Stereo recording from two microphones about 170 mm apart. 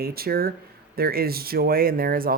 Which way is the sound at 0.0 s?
65° right (ahead or behind).